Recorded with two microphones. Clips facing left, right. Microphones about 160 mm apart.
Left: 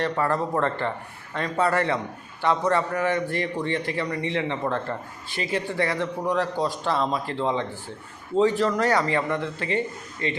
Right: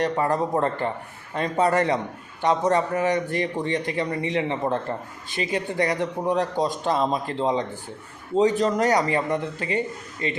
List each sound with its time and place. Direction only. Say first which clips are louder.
0.0 s a man's voice: right 2 dB; 20° right (ahead or behind)